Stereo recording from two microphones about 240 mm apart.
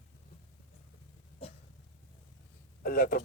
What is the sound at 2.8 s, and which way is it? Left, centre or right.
Speech, left.